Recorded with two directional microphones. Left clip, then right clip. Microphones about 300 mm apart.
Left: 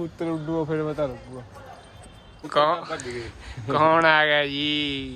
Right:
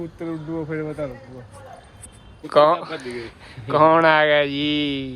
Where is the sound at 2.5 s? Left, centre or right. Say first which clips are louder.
Right 6 dB; centre.